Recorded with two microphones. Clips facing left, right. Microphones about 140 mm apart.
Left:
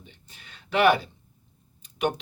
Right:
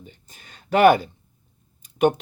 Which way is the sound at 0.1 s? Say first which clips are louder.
Right 3 dB; 45° right (ahead or behind).